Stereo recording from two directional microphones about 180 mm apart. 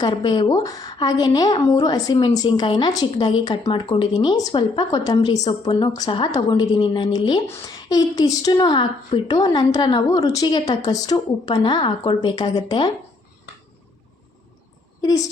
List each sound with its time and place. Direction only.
0.0 s a woman's voice: 25° left (ahead or behind)